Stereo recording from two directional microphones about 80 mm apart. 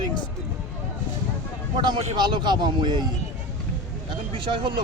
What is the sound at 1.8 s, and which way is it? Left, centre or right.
Speech, right.